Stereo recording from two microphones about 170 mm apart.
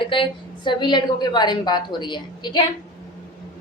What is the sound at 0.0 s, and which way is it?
A woman's voice, 30° left (ahead or behind).